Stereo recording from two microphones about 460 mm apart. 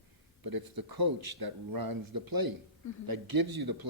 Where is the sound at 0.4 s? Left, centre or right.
Right.